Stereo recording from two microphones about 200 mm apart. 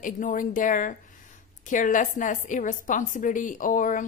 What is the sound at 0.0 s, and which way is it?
A woman's voice, 40° left (ahead or behind).